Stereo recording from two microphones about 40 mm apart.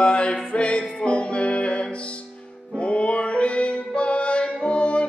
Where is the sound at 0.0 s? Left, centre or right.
Left.